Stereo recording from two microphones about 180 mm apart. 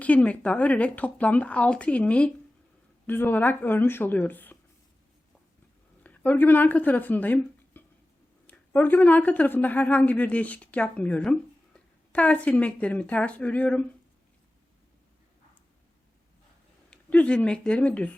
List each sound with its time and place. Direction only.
0.0 s speech: 5° left (ahead or behind)
6.0 s speech: 10° left (ahead or behind)
16.9 s speech: 5° left (ahead or behind)